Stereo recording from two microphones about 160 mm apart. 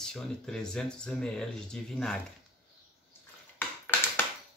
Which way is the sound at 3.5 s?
15° left (ahead or behind).